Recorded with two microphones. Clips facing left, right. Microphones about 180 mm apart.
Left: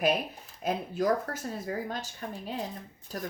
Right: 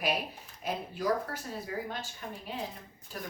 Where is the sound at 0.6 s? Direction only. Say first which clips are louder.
Left 5 dB; 45° left (ahead or behind).